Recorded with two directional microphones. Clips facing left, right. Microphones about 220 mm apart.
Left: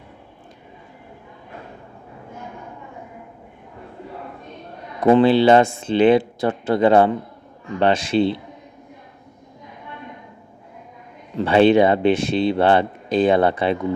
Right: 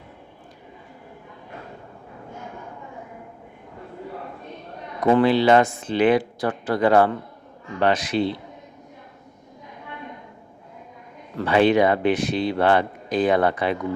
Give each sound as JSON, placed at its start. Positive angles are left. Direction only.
{"t": 5.0, "sound": "speech", "side_deg": 25}
{"t": 11.3, "sound": "speech", "side_deg": 25}